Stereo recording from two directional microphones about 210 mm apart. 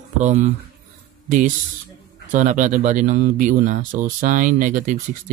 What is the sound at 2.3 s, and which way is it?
Speech, 35° right (ahead or behind).